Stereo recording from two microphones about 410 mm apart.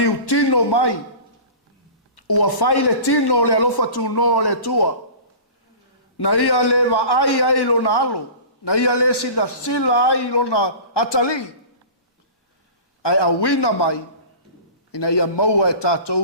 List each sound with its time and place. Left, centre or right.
0.0 s a sound: left
2.1 s speech: left
6.1 s a man's voice: left
13.0 s a man's voice: left